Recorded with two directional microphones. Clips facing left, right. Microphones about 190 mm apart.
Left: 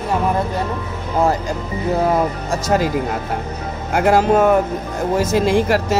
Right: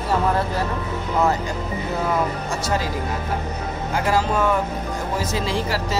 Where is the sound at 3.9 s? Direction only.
60° left (ahead or behind).